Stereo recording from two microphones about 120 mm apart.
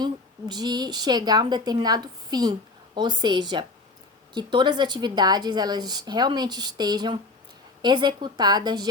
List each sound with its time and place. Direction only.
0.0 s a woman's voice: 35° right (ahead or behind)